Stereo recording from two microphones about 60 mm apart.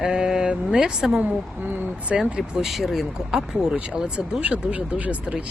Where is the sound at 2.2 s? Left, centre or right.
Centre; by 5.4 s right.